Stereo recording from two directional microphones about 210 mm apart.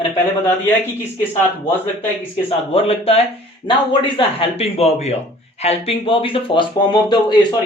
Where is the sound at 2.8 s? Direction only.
30° left (ahead or behind).